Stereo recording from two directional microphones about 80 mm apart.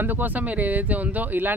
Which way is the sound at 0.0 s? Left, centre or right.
Right.